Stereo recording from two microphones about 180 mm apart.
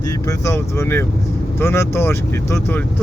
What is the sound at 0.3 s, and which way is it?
Speech, 15° left (ahead or behind).